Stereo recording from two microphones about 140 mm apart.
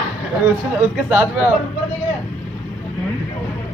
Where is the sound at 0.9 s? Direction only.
10° right (ahead or behind).